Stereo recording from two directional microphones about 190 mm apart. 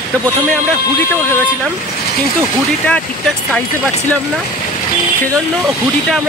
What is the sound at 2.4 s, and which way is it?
Speech, 5° left (ahead or behind).